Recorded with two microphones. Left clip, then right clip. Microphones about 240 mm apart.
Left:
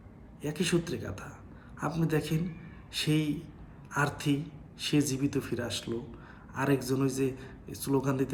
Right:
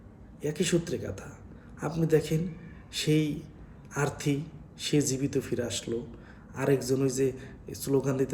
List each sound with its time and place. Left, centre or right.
0.4 s a man's voice: centre